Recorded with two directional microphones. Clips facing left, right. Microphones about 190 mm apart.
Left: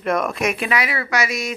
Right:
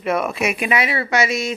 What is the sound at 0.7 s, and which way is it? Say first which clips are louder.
Speech: right 2 dB; 25° right (ahead or behind).